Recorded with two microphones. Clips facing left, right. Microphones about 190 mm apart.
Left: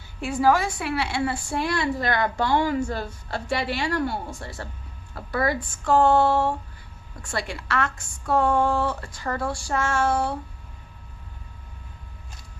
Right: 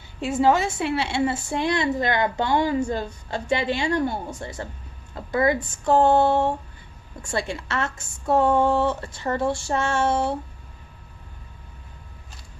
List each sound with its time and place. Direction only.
0.2 s a woman's voice: 20° right (ahead or behind)